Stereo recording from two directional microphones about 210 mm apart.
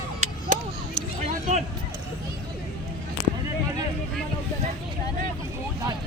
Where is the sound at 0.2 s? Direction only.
30° right (ahead or behind).